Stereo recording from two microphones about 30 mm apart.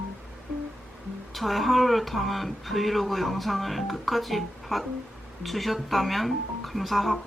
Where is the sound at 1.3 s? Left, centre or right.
Centre.